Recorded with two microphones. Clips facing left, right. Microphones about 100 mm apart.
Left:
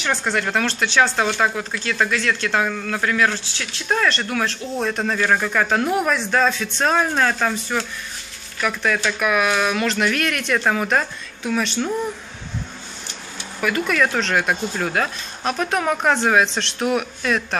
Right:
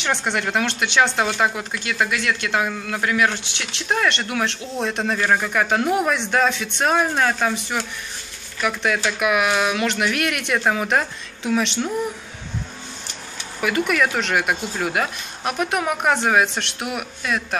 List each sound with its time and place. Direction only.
0.0 s speech: 20° right (ahead or behind)
5.3 s speech: 15° right (ahead or behind)
13.6 s speech: 20° right (ahead or behind)